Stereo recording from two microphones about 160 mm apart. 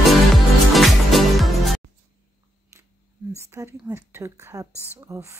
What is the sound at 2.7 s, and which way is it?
Camera, 20° right (ahead or behind).